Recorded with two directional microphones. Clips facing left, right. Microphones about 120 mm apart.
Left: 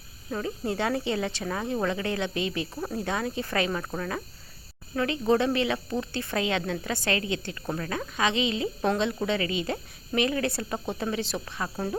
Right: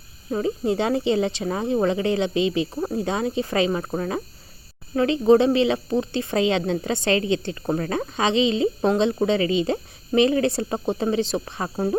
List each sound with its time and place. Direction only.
0.3 s speech: 25° right (ahead or behind)